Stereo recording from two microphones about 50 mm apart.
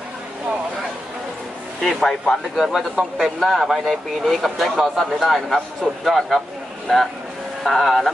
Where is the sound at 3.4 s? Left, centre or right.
Centre.